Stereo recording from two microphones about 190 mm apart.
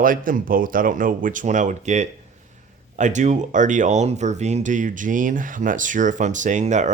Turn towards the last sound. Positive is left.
turn(degrees=-40)  # may be behind; listen again after turning